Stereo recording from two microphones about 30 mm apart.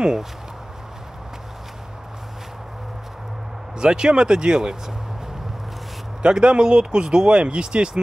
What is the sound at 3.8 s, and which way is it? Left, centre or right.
Speech, right.